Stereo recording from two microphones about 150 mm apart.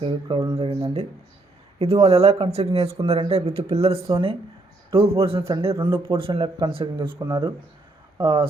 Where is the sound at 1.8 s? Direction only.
45° right (ahead or behind).